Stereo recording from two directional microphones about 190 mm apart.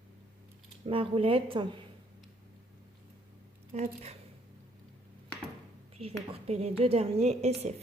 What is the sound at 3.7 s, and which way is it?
Speech, 35° right (ahead or behind).